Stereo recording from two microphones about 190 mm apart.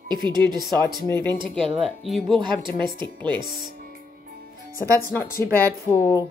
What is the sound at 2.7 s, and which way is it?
Speech, 25° right (ahead or behind).